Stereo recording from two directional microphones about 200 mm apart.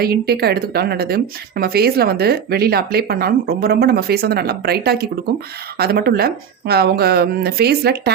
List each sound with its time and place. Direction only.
0.0 s a woman's voice: 50° right (ahead or behind)